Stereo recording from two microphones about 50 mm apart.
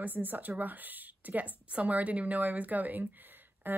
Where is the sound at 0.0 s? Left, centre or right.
Right.